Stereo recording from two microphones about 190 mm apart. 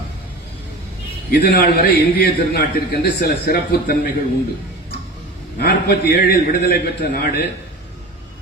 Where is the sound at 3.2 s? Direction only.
60° left (ahead or behind).